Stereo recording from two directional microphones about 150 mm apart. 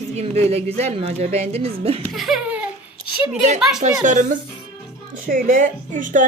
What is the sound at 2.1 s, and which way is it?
Laughter, centre (ahead or behind).